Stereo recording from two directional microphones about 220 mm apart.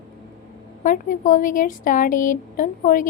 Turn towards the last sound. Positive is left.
turn(degrees=35)  # may be behind; listen again after turning